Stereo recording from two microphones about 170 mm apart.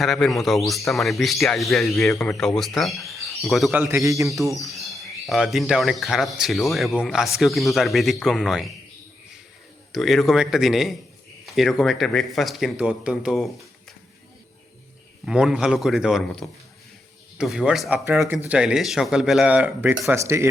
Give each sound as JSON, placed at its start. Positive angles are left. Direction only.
{"t": 0.0, "sound": "speech", "side_deg": 0}
{"t": 3.8, "sound": "a man's voice", "side_deg": -15}
{"t": 4.5, "sound": "speech", "side_deg": 0}
{"t": 9.9, "sound": "speech", "side_deg": 0}
{"t": 15.3, "sound": "speech", "side_deg": -5}